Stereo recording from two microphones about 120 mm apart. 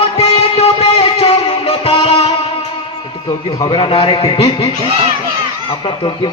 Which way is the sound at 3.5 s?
40° left (ahead or behind).